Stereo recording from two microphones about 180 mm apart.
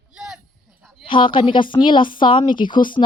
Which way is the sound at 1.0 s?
30° left (ahead or behind).